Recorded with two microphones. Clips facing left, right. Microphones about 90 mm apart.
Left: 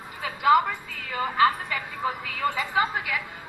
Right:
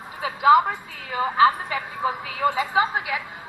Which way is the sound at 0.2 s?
20° right (ahead or behind).